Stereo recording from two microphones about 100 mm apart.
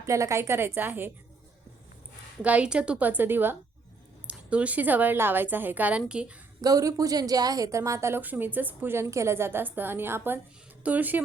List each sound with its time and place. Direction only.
0.0 s a woman's voice: 30° right (ahead or behind)
2.4 s a woman's voice: 15° right (ahead or behind)
6.6 s a woman's voice: 35° right (ahead or behind); by 11.2 s 15° right (ahead or behind)